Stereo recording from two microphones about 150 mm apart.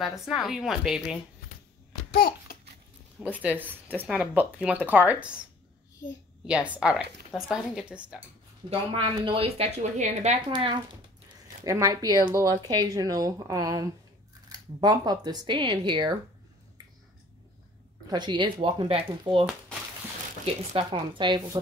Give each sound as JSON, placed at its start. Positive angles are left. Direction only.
{"t": 0.0, "sound": "a woman's voice", "side_deg": 0}
{"t": 2.1, "sound": "babbling", "side_deg": 75}
{"t": 3.2, "sound": "speech", "side_deg": -10}
{"t": 6.4, "sound": "speech", "side_deg": -10}
{"t": 8.6, "sound": "a woman's voice", "side_deg": -35}
{"t": 10.5, "sound": "speech", "side_deg": -30}
{"t": 18.1, "sound": "speech", "side_deg": -30}
{"t": 20.7, "sound": "speech", "side_deg": -35}